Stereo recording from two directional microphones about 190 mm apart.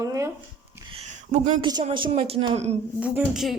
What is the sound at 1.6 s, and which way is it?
A woman's voice, 25° right (ahead or behind).